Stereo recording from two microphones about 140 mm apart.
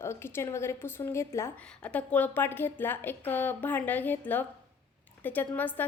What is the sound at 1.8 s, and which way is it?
A woman's voice, 10° left (ahead or behind).